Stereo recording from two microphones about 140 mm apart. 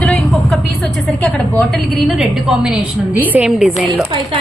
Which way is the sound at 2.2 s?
5° right (ahead or behind).